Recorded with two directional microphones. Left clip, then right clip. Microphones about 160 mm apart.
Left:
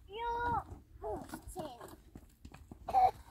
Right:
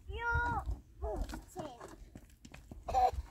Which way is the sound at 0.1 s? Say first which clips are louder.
Even; 10° left (ahead or behind).